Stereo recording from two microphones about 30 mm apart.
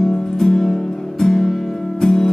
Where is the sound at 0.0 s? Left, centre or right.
Centre.